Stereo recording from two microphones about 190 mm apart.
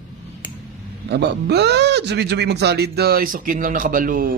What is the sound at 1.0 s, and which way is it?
Speech, 60° right (ahead or behind).